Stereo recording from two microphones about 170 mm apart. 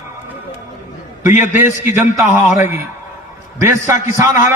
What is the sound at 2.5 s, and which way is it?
Speech, 45° left (ahead or behind).